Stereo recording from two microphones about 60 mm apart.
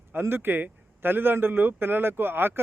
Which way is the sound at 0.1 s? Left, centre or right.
Right.